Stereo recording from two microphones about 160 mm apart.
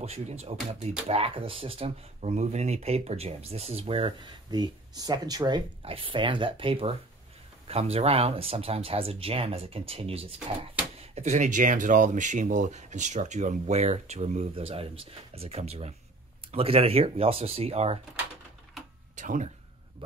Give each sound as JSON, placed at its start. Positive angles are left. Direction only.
{"t": 0.0, "sound": "speech", "side_deg": -40}
{"t": 19.1, "sound": "speech", "side_deg": -50}